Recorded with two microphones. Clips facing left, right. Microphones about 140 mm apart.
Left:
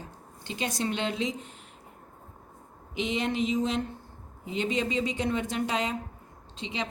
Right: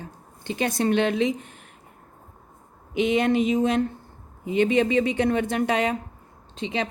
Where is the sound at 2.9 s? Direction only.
55° right (ahead or behind).